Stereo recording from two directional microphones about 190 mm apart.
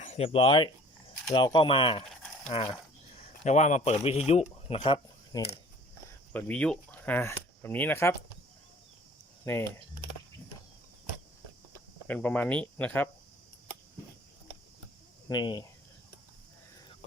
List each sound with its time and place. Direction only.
0.0 s a man's voice: 35° left (ahead or behind)
6.3 s speech: 5° left (ahead or behind)
9.4 s speech: 10° left (ahead or behind)
12.0 s speech: 10° left (ahead or behind)
15.3 s speech: 20° left (ahead or behind)